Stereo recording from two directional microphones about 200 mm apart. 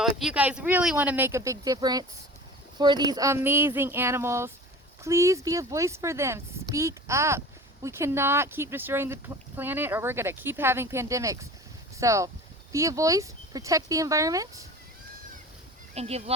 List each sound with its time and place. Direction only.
0.0 s speech: centre (ahead or behind)
16.0 s speech: 30° right (ahead or behind)